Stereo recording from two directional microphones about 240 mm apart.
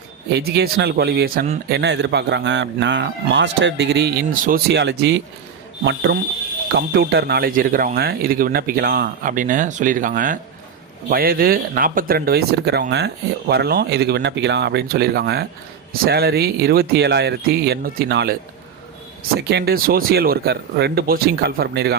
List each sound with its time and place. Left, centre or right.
0.3 s a man's voice: right
19.4 s speech: right